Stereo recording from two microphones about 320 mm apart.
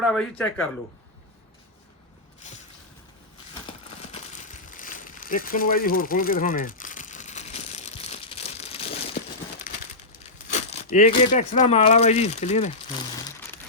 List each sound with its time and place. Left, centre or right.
0.0 s a man's voice: centre
4.7 s a sound: left
10.5 s speech: centre